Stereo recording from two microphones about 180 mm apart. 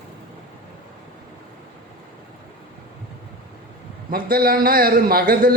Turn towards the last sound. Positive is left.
turn(degrees=-55)  # may be behind; listen again after turning